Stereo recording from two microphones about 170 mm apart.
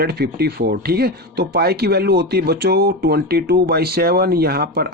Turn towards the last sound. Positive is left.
turn(degrees=-65)  # may be behind; listen again after turning